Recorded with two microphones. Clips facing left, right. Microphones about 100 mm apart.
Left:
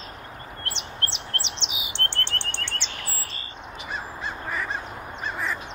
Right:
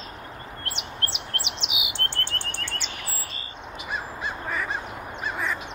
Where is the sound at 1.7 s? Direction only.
35° left (ahead or behind).